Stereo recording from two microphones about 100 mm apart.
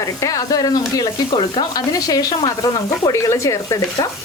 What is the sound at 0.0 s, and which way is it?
Speech, 35° left (ahead or behind).